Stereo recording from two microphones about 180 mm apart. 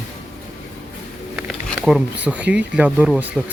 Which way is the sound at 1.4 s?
5° right (ahead or behind).